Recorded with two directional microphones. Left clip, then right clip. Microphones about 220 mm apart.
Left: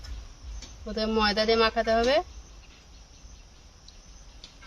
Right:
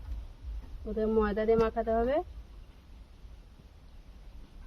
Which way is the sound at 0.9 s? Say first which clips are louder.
Left 4 dB; 5° left (ahead or behind).